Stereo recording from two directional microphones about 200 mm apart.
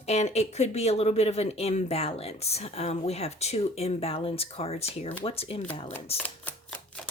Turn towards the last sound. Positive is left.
turn(degrees=10)  # may be behind; listen again after turning